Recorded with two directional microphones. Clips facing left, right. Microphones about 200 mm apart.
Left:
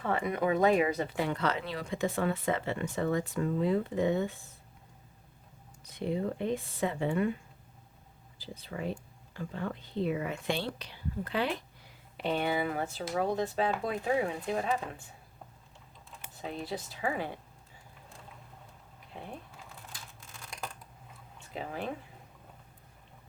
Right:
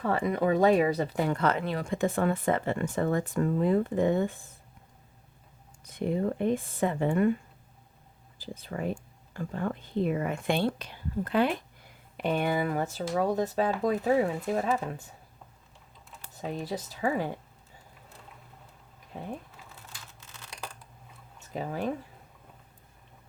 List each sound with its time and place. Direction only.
0.0 s speech: 35° right (ahead or behind)
5.8 s speech: 50° right (ahead or behind)
8.4 s speech: 50° right (ahead or behind)
16.4 s speech: 40° right (ahead or behind)
19.1 s speech: 40° right (ahead or behind)
21.5 s speech: 40° right (ahead or behind)